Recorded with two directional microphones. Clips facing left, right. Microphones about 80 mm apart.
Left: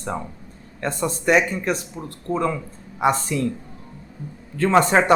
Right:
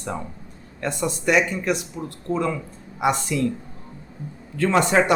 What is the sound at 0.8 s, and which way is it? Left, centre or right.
A man's voice, left.